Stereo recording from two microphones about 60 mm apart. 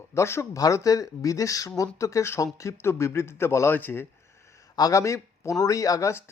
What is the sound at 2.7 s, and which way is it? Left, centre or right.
Speech, left.